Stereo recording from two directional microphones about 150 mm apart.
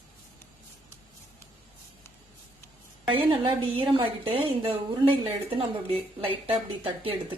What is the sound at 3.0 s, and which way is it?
A woman's voice, 35° right (ahead or behind).